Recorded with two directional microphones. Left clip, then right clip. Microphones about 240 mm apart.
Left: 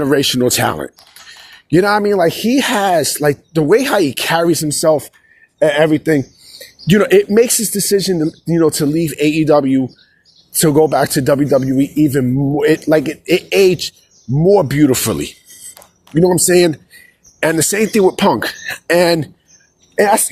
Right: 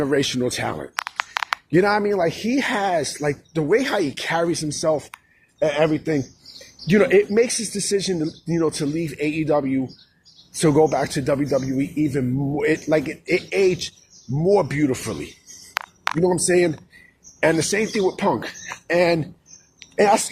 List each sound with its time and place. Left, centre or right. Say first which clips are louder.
0.0 s speech: left 7 dB; left
14.3 s speech: left 7 dB; left